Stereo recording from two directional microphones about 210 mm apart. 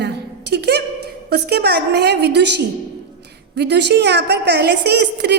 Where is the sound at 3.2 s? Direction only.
50° right (ahead or behind).